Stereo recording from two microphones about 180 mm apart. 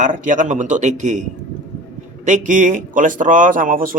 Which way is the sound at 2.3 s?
45° right (ahead or behind).